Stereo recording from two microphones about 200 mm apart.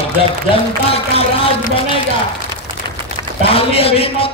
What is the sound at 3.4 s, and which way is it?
Speech, 30° left (ahead or behind).